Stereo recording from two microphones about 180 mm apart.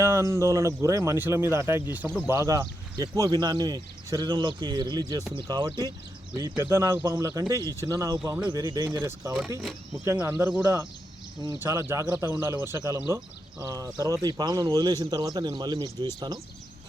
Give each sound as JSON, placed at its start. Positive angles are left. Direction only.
{"t": 0.0, "sound": "speech", "side_deg": -15}